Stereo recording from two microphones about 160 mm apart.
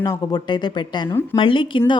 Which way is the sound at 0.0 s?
25° left (ahead or behind).